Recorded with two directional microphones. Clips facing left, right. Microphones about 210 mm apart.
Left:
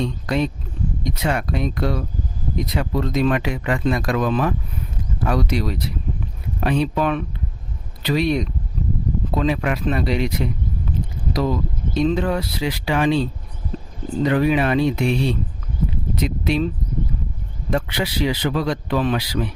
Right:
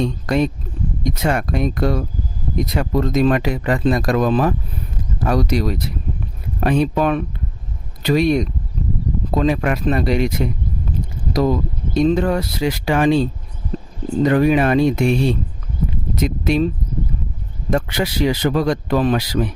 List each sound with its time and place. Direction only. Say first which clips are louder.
0.0 s speech: right 3 dB; 45° right (ahead or behind)
17.7 s speech: right 3 dB; 45° right (ahead or behind)